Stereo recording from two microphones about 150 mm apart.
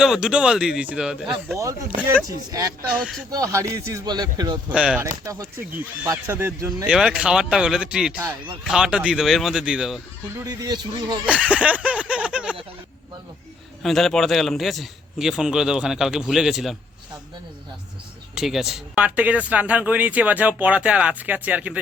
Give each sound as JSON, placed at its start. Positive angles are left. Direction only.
{"t": 0.0, "sound": "a man's voice", "side_deg": -5}
{"t": 2.2, "sound": "speech", "side_deg": -25}
{"t": 3.0, "sound": "a man's voice", "side_deg": 0}
{"t": 3.3, "sound": "speech", "side_deg": -20}
{"t": 4.7, "sound": "a man's voice", "side_deg": -5}
{"t": 5.2, "sound": "speech", "side_deg": -20}
{"t": 6.8, "sound": "a man's voice", "side_deg": -5}
{"t": 10.3, "sound": "speech", "side_deg": -25}
{"t": 11.3, "sound": "a sound", "side_deg": -10}
{"t": 13.8, "sound": "a man's voice", "side_deg": 0}
{"t": 18.3, "sound": "speech", "side_deg": 0}